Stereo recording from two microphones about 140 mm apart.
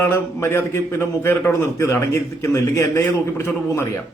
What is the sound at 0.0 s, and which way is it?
A man's voice, 15° left (ahead or behind).